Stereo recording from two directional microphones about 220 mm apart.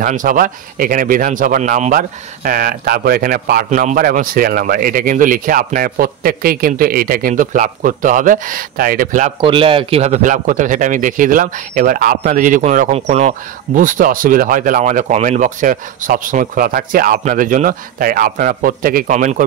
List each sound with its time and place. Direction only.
0.0 s speech: 35° right (ahead or behind)
9.4 s speech: 25° right (ahead or behind)